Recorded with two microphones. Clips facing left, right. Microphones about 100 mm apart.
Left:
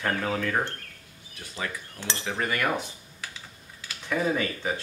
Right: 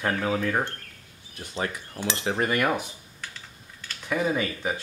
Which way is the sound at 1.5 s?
30° right (ahead or behind).